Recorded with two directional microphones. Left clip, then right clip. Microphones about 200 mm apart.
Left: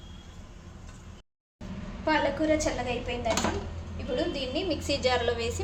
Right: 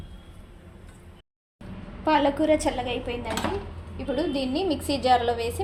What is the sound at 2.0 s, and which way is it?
Speech, 30° right (ahead or behind).